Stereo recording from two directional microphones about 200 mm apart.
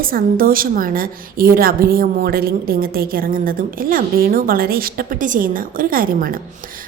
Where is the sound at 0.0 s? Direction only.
45° right (ahead or behind).